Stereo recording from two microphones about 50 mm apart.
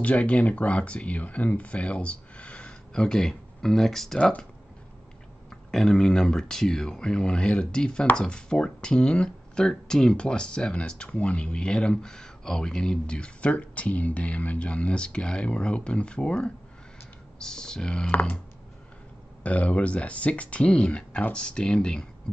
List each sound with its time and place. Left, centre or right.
0.0 s speech: left; by 4.2 s centre
5.7 s speech: centre
18.1 s speech: left
19.4 s speech: left